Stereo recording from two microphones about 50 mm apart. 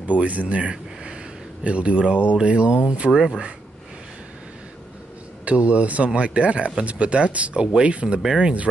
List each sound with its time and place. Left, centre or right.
0.2 s speech: right
5.4 s speech: right